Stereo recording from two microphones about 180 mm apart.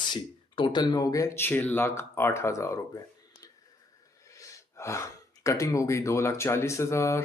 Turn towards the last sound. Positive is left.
turn(degrees=15)  # may be behind; listen again after turning